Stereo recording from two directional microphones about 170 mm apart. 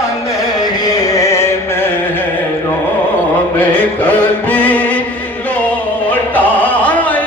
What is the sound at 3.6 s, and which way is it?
Music, 10° left (ahead or behind).